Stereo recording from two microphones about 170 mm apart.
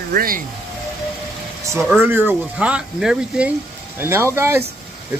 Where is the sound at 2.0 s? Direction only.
10° right (ahead or behind).